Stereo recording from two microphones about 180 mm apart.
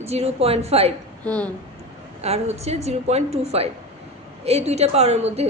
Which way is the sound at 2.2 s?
35° right (ahead or behind).